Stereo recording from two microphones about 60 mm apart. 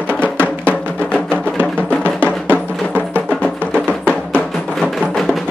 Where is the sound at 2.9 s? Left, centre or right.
Left.